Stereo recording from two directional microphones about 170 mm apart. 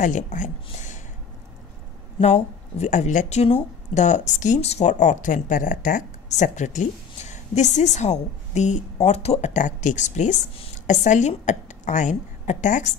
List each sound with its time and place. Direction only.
0.0 s speech: 50° left (ahead or behind)
0.7 s a sound: 45° left (ahead or behind)
2.1 s speech: 40° left (ahead or behind)